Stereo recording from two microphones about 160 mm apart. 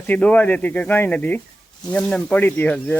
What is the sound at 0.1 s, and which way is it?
Speech, 10° left (ahead or behind).